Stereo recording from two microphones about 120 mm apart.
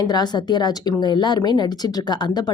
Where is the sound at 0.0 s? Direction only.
35° left (ahead or behind).